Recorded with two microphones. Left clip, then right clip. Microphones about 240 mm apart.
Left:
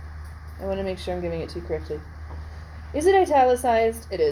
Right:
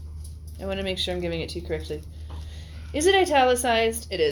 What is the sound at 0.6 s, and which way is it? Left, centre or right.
A woman's voice, right.